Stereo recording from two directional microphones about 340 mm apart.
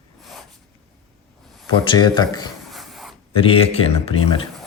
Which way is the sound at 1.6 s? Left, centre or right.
Centre.